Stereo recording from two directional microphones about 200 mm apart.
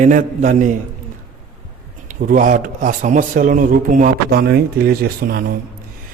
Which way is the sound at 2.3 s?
40° right (ahead or behind).